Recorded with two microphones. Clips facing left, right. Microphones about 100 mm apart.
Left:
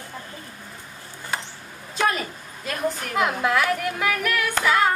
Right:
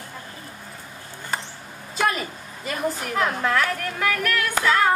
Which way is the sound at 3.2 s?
10° left (ahead or behind).